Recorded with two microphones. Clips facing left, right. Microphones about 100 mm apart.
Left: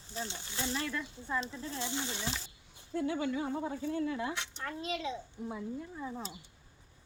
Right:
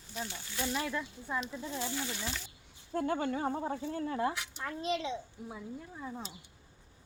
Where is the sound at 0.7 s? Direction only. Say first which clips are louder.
Right 2 dB; 15° right (ahead or behind).